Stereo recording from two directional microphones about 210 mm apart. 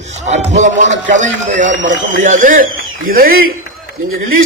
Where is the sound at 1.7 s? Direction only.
60° right (ahead or behind).